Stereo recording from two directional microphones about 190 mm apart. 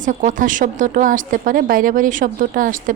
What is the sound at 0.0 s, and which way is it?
Speech, 40° right (ahead or behind).